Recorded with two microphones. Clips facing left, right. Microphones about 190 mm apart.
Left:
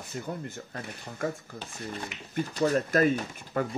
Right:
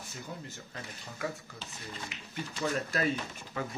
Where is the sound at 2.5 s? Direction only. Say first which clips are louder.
Left 8 dB; 40° left (ahead or behind).